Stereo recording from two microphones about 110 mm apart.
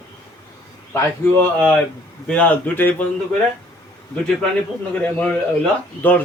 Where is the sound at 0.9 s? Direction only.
20° left (ahead or behind).